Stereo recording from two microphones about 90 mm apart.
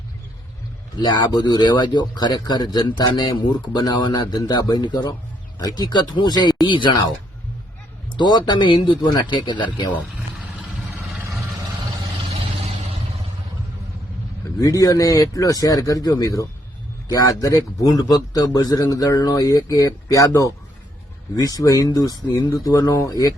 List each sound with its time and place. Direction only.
0.9 s a man's voice: 55° left (ahead or behind)
6.7 s speech: 65° left (ahead or behind)
8.1 s speech: 50° left (ahead or behind)
12.4 s vehicle: 90° right
14.6 s a man's voice: 40° left (ahead or behind)